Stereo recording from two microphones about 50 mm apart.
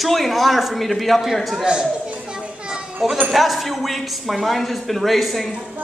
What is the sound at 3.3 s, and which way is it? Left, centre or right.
A man's voice, centre.